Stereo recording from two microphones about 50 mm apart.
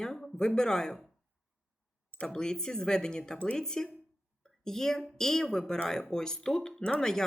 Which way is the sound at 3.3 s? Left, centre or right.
Left.